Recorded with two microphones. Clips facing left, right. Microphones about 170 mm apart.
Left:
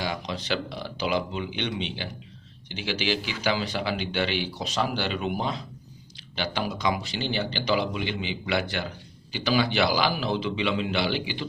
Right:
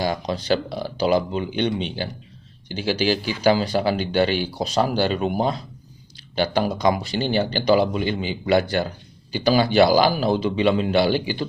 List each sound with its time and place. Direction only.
0.0 s speech: 40° right (ahead or behind)